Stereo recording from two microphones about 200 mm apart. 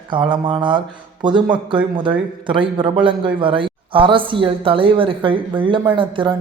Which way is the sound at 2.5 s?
25° right (ahead or behind).